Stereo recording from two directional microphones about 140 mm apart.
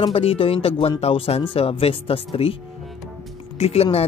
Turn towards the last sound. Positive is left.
turn(degrees=45)  # may be behind; listen again after turning